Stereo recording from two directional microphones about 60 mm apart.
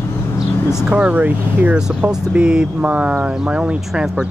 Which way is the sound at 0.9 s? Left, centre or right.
Right.